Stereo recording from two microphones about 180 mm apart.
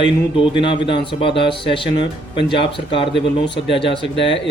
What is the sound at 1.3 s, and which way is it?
Speech, 70° left (ahead or behind).